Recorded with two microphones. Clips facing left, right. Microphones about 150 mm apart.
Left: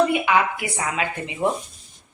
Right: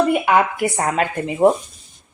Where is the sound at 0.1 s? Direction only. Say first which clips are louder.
Right 4 dB; 45° right (ahead or behind).